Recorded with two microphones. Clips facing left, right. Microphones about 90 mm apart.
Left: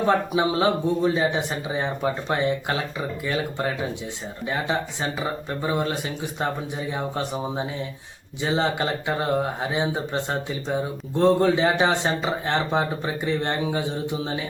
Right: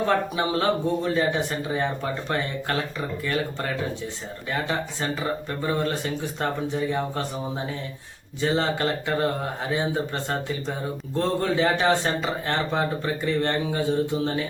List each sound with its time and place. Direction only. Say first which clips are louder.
0.0 s speech: left 2 dB; 15° left (ahead or behind)